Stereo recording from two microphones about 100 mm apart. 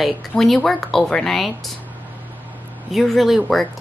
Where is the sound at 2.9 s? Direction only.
Centre (ahead or behind).